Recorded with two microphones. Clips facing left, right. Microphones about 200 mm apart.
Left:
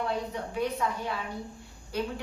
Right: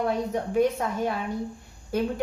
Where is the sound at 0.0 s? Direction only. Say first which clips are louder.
Right 6 dB; 45° right (ahead or behind).